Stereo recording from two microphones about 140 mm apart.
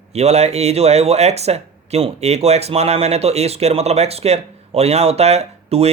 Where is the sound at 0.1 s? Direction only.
50° right (ahead or behind).